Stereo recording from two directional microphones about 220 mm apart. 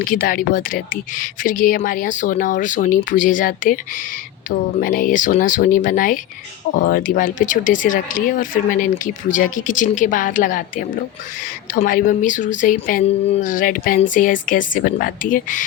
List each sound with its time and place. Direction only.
0.0 s speech: 40° left (ahead or behind)